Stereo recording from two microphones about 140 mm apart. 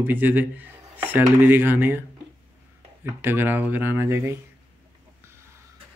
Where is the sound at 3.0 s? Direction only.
15° right (ahead or behind).